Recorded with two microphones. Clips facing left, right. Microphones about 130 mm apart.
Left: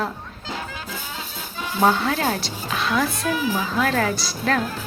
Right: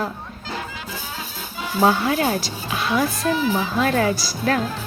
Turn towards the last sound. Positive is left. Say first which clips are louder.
# right 1 dB
turn(degrees=-5)  # may be behind; listen again after turning